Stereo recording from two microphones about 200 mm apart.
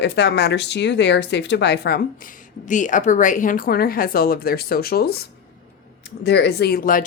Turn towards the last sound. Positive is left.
turn(degrees=45)  # may be behind; listen again after turning